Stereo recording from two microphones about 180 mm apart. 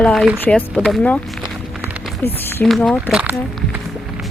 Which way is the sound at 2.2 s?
10° left (ahead or behind).